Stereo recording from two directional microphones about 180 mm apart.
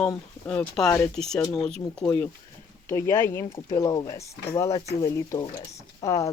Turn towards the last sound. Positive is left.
turn(degrees=15)  # may be behind; listen again after turning